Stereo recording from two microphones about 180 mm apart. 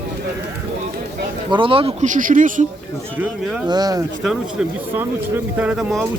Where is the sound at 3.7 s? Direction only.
20° right (ahead or behind).